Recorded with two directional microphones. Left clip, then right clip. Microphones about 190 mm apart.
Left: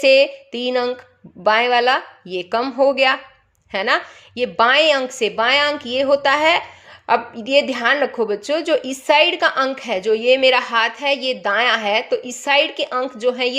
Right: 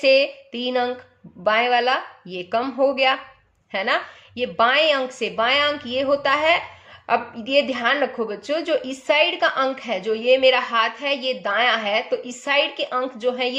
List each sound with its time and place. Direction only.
0.0 s a woman's voice: 35° left (ahead or behind)